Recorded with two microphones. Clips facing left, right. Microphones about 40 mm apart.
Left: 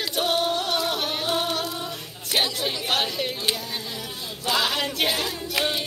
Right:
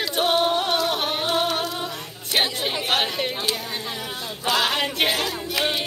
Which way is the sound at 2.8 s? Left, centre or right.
Centre.